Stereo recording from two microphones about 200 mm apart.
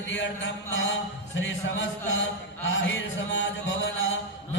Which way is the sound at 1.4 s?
65° left (ahead or behind).